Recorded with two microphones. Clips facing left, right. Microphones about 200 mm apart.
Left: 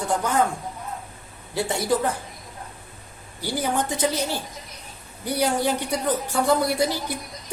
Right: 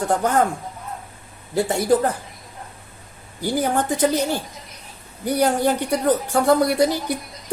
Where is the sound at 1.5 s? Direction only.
50° right (ahead or behind).